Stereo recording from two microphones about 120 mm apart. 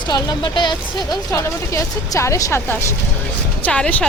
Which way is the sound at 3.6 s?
10° left (ahead or behind).